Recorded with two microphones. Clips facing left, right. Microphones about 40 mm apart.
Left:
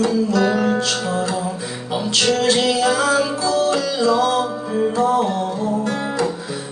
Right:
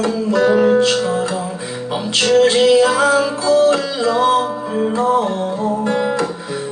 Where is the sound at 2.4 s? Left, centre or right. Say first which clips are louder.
Right 6 dB; right.